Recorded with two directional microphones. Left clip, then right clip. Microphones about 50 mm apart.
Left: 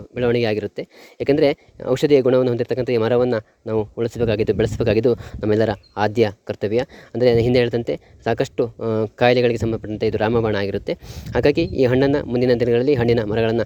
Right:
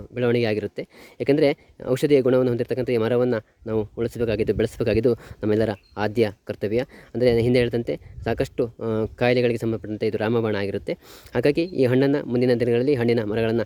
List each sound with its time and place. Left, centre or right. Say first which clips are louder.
0.1 s speech: left 3 dB; right
1.9 s speech: left 3 dB; right